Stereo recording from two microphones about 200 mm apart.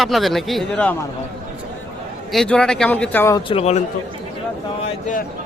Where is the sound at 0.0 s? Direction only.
Centre (ahead or behind).